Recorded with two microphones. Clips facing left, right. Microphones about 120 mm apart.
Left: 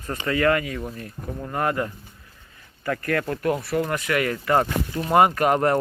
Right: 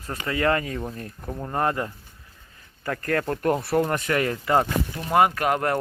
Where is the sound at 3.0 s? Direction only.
30° right (ahead or behind).